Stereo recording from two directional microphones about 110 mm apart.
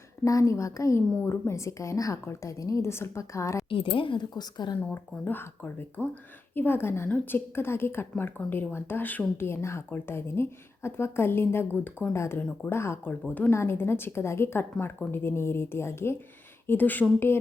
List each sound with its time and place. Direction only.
0.3 s speech: 30° left (ahead or behind)
3.7 s a woman's voice: 55° left (ahead or behind)
4.8 s speech: 10° left (ahead or behind)